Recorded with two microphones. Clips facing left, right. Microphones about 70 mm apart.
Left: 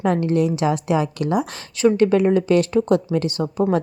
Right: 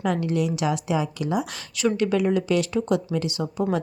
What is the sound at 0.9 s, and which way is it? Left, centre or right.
Speech, left.